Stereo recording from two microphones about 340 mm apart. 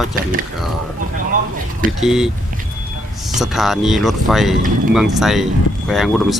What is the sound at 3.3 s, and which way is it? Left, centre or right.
Speech, centre.